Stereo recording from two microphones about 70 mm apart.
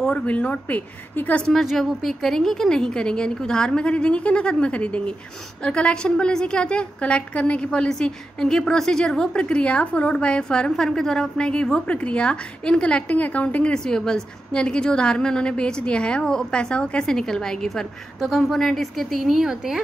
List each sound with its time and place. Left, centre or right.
0.0 s speech: centre
1.5 s a woman's voice: centre; by 13.7 s left
13.7 s a woman's voice: centre